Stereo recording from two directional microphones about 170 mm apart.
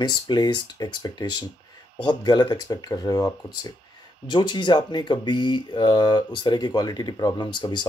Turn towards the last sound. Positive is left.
turn(degrees=25)  # may be behind; listen again after turning